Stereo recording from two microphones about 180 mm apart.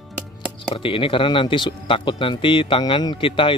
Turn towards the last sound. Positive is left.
turn(degrees=30)  # may be behind; listen again after turning